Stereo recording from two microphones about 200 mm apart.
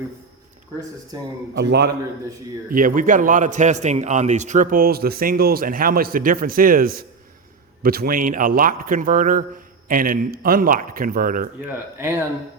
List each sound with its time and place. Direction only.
1.5 s a man's voice: 55° right (ahead or behind)
2.6 s a man's voice: 45° right (ahead or behind)
11.9 s speech: 10° right (ahead or behind)